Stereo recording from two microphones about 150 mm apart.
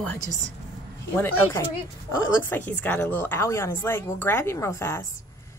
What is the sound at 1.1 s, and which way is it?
A woman's voice, 15° left (ahead or behind).